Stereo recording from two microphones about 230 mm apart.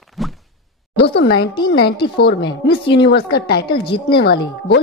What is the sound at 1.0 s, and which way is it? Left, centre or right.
A woman's voice, left.